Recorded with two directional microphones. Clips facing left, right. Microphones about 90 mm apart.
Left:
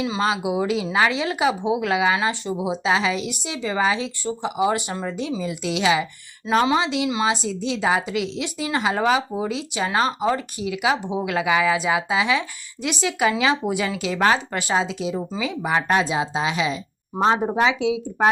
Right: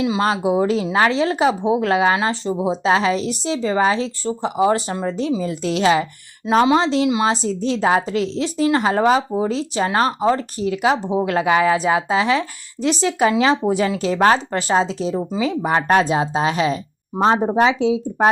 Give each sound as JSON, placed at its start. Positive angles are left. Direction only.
{"t": 0.2, "sound": "speech", "side_deg": -40}
{"t": 6.5, "sound": "a woman's voice", "side_deg": -30}
{"t": 17.2, "sound": "speech", "side_deg": -20}
{"t": 17.6, "sound": "speech", "side_deg": -35}